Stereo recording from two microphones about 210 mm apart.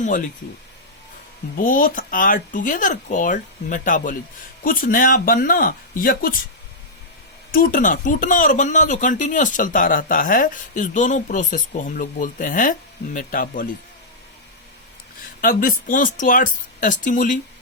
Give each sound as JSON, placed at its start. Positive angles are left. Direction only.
{"t": 1.5, "sound": "speech", "side_deg": 40}
{"t": 7.5, "sound": "speech", "side_deg": 40}
{"t": 15.4, "sound": "speech", "side_deg": 40}